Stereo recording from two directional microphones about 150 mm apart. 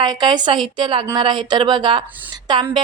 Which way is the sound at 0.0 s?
30° right (ahead or behind).